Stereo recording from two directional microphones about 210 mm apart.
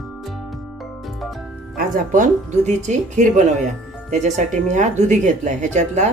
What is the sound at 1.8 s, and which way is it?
Speech, 40° right (ahead or behind).